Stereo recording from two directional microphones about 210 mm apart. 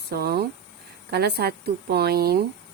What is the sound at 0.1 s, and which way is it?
Speech, 50° right (ahead or behind).